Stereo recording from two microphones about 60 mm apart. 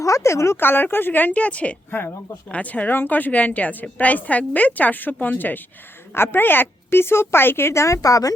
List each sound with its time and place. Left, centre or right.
0.0 s speech: left
0.6 s a woman's voice: left